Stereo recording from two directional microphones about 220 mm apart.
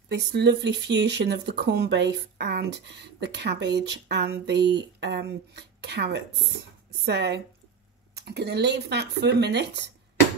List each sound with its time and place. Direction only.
0.1 s speech: 50° right (ahead or behind)